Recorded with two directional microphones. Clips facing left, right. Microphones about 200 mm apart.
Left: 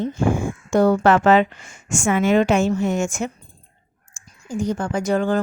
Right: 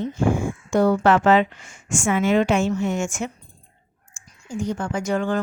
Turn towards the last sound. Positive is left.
turn(degrees=35)  # may be behind; listen again after turning